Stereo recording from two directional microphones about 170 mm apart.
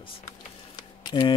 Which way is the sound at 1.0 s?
30° left (ahead or behind).